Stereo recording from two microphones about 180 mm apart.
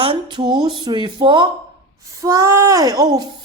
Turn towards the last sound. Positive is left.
turn(degrees=-25)  # may be behind; listen again after turning